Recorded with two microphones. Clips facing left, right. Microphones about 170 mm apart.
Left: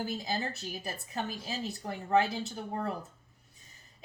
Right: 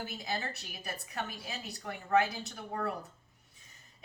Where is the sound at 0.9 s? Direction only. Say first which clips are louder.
Left 1 dB; 30° left (ahead or behind).